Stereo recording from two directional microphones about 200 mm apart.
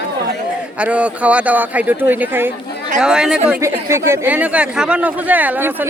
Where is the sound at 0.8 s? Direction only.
5° right (ahead or behind).